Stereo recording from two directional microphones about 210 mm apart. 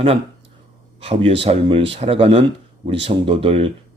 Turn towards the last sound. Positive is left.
turn(degrees=-25)  # may be behind; listen again after turning